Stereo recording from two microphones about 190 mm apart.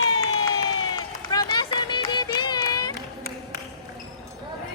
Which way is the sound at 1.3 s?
20° left (ahead or behind).